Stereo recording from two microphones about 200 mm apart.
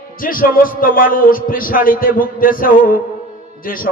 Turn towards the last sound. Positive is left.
turn(degrees=45)  # may be behind; listen again after turning